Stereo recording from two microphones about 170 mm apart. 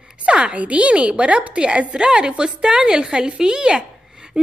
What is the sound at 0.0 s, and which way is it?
A woman's voice, 5° right (ahead or behind).